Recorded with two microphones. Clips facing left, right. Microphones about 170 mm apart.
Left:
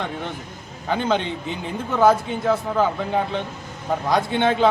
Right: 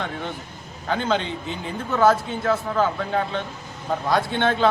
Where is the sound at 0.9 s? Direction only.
10° left (ahead or behind).